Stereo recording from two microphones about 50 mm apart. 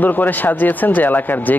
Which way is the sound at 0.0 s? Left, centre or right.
Left.